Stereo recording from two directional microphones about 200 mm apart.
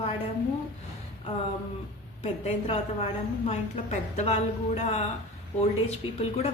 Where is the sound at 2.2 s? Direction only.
30° left (ahead or behind).